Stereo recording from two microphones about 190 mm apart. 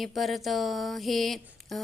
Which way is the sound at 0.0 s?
Centre (ahead or behind).